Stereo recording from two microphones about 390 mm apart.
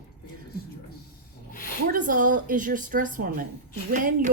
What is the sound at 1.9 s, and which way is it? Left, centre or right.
A woman's voice, centre.